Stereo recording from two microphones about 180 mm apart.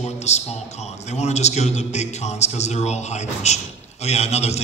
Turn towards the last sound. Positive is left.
turn(degrees=35)  # may be behind; listen again after turning